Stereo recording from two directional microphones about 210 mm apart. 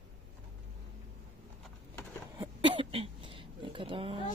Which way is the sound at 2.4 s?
25° right (ahead or behind).